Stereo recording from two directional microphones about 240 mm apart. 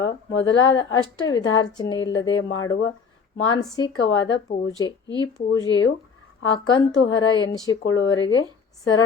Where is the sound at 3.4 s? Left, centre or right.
Left.